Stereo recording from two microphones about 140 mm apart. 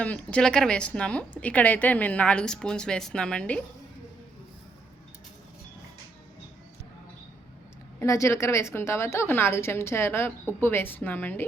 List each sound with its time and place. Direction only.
0.0 s a woman's voice: 10° left (ahead or behind)
7.9 s a woman's voice: 20° left (ahead or behind)